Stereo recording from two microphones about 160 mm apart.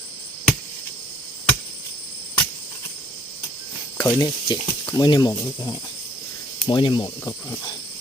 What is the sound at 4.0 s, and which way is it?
Speech, 20° left (ahead or behind).